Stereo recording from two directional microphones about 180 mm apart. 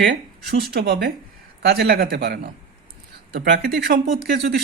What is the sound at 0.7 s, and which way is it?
Speech, 60° right (ahead or behind).